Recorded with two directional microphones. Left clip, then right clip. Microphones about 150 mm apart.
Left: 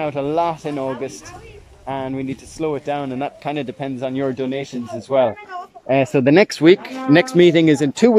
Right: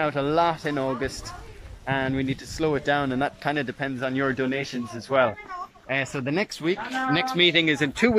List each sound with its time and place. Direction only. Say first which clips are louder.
0.0 s a child's voice: left 3 dB; 15° left (ahead or behind)
5.9 s speech: left 12 dB; 60° left (ahead or behind)
7.3 s speech: left 4 dB; 40° left (ahead or behind)